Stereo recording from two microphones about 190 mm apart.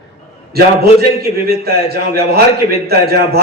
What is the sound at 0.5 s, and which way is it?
A man's voice, 55° right (ahead or behind).